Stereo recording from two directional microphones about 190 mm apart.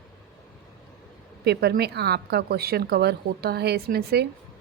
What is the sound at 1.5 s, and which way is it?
A woman's voice, 60° right (ahead or behind).